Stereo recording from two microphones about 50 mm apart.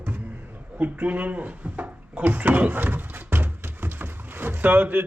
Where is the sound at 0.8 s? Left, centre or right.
Right.